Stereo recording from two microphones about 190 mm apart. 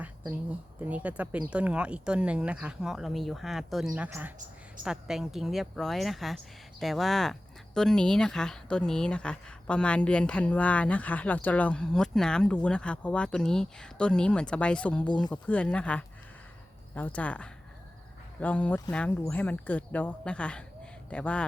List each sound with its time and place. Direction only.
0.8 s speech: 5° right (ahead or behind)
15.0 s speech: 25° left (ahead or behind)
15.3 s speech: 5° left (ahead or behind)